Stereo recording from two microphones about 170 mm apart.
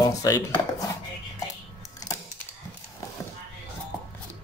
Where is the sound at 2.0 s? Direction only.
20° left (ahead or behind).